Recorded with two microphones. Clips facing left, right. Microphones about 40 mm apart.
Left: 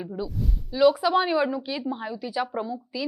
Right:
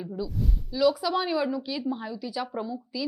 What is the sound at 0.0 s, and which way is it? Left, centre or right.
A woman's voice, left.